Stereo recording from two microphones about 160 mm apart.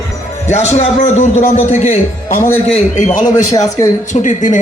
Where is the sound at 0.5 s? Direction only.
45° left (ahead or behind).